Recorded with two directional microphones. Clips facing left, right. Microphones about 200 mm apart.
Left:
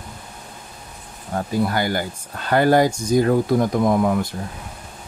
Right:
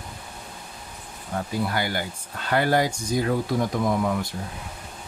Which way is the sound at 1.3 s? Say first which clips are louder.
Left 5 dB; 45° left (ahead or behind).